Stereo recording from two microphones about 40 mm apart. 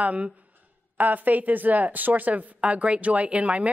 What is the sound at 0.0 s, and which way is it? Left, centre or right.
A woman's voice, right.